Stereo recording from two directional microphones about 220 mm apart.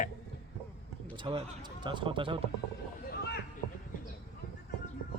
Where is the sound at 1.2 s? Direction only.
25° right (ahead or behind).